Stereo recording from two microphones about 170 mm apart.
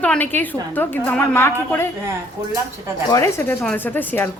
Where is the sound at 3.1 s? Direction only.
15° left (ahead or behind).